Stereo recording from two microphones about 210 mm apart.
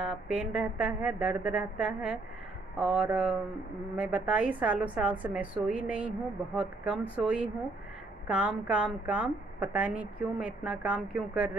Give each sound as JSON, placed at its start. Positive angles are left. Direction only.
{"t": 0.0, "sound": "a woman's voice", "side_deg": -5}